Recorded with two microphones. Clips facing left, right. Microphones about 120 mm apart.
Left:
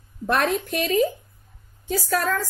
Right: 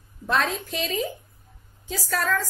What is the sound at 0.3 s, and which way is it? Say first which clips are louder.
A woman's voice: left 3 dB; 55° left (ahead or behind).